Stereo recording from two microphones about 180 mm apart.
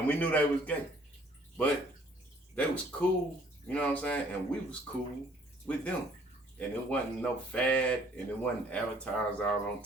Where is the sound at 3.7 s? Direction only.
5° left (ahead or behind).